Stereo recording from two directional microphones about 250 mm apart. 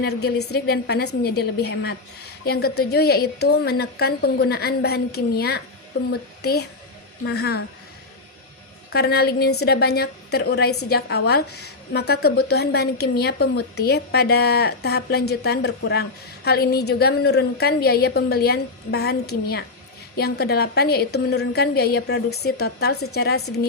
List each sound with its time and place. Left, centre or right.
0.0 s a woman's voice: left
8.9 s a woman's voice: left